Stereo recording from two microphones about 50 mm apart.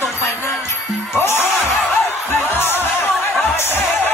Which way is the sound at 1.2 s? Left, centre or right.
Left.